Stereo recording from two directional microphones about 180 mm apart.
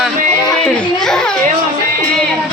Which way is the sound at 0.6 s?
5° left (ahead or behind).